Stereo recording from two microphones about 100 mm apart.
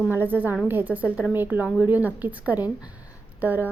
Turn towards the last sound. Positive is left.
turn(degrees=-20)  # may be behind; listen again after turning